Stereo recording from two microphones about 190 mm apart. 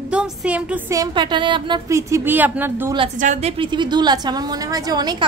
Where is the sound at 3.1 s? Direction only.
40° right (ahead or behind).